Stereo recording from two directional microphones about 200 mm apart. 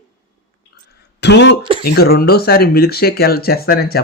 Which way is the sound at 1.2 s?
60° left (ahead or behind).